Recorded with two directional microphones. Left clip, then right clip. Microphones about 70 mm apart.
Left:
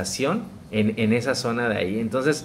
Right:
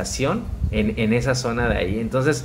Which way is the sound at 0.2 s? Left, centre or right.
Left.